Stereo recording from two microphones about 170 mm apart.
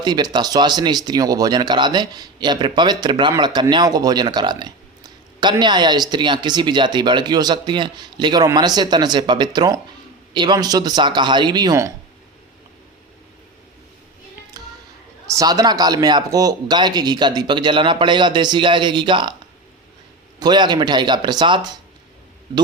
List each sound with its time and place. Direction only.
0.0 s speech: 25° right (ahead or behind)
14.5 s music: 20° right (ahead or behind)
15.3 s speech: 20° right (ahead or behind)
20.4 s speech: 25° right (ahead or behind)